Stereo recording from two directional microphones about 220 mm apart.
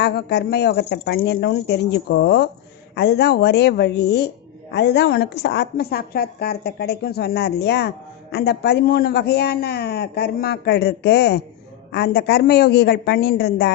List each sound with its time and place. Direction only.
0.0 s a woman's voice: 50° left (ahead or behind)